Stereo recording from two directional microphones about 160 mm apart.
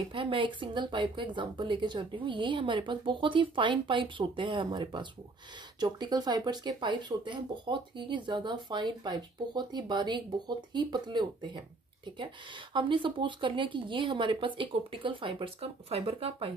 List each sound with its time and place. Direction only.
0.1 s speech: 30° right (ahead or behind)
12.7 s speech: 30° right (ahead or behind)